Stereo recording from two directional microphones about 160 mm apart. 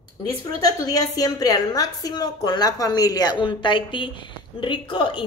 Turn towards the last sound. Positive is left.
turn(degrees=30)  # may be behind; listen again after turning